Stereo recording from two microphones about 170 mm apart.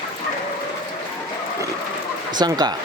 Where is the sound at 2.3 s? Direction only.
25° right (ahead or behind).